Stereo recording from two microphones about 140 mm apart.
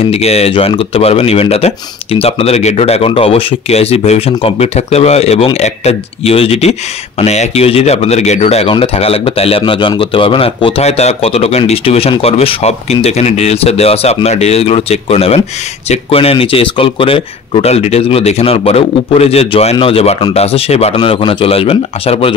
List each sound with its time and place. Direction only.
0.1 s speech: 45° left (ahead or behind)
20.9 s speech: 35° left (ahead or behind)